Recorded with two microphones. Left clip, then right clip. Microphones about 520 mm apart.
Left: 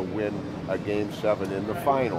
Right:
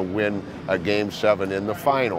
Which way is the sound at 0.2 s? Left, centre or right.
Right.